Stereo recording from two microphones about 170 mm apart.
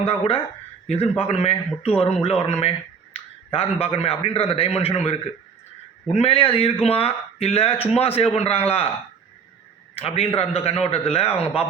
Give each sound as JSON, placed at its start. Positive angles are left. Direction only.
{"t": 0.0, "sound": "a man's voice", "side_deg": 35}
{"t": 6.1, "sound": "a man's voice", "side_deg": 35}
{"t": 9.9, "sound": "a man's voice", "side_deg": 35}